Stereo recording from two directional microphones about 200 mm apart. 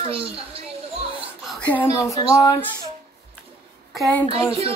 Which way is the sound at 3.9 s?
5° left (ahead or behind).